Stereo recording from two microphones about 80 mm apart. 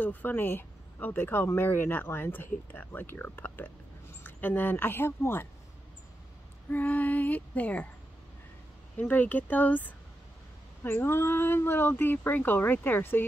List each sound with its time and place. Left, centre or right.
0.0 s speech: left
6.7 s speech: left
8.9 s speech: centre